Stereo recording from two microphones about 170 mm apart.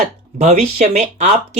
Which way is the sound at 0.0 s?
45° right (ahead or behind).